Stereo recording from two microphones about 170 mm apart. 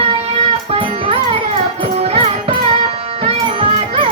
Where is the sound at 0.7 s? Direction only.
35° right (ahead or behind).